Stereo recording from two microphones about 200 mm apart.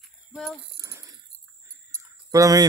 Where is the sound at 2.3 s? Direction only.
15° right (ahead or behind).